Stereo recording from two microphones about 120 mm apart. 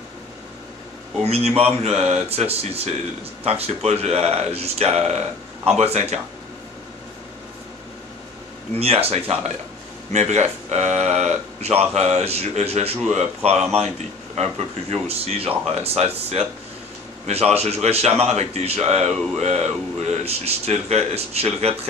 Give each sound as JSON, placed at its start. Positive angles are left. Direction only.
{"t": 1.2, "sound": "speech", "side_deg": -60}
{"t": 8.7, "sound": "speech", "side_deg": -55}